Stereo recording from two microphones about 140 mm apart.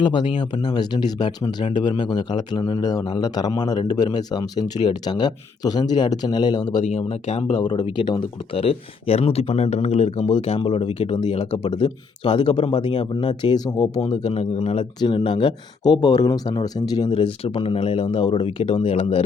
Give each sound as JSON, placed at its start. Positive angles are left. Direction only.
{"t": 0.0, "sound": "a man's voice", "side_deg": 35}
{"t": 6.7, "sound": "speech", "side_deg": 55}
{"t": 7.6, "sound": "speech", "side_deg": 30}
{"t": 17.2, "sound": "speech", "side_deg": 40}